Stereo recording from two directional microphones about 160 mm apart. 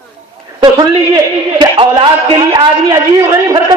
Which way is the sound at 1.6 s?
30° right (ahead or behind).